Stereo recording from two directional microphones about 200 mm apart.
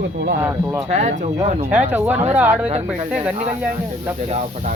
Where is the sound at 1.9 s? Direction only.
10° right (ahead or behind).